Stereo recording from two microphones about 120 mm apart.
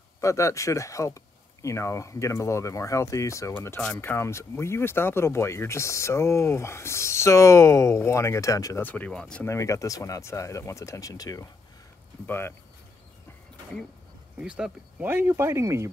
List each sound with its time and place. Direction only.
0.2 s speech: 25° left (ahead or behind)
8.8 s speech: 10° left (ahead or behind)
9.4 s speech: 25° left (ahead or behind)
12.3 s speech: 20° left (ahead or behind)
14.4 s speech: 10° right (ahead or behind); by 15.9 s 25° right (ahead or behind)